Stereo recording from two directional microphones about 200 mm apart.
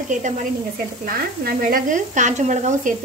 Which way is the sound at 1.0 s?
45° right (ahead or behind).